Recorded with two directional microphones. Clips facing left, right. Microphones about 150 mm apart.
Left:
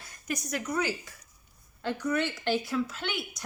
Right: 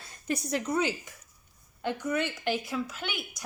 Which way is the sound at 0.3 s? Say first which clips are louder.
Right 3 dB; 30° right (ahead or behind).